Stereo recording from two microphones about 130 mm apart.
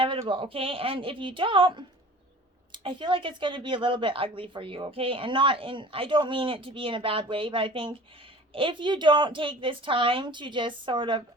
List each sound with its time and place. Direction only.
0.0 s a woman's voice: 45° right (ahead or behind)